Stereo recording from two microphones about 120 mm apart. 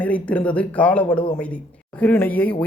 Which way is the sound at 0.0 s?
10° left (ahead or behind).